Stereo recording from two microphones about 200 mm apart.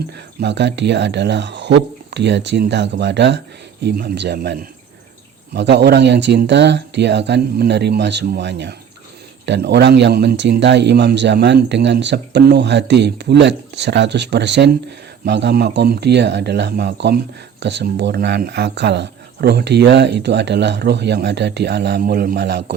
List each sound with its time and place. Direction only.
0.3 s speech: 60° right (ahead or behind)
5.5 s speech: 60° right (ahead or behind)